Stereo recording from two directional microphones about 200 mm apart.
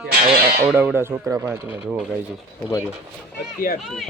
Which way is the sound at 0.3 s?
50° right (ahead or behind).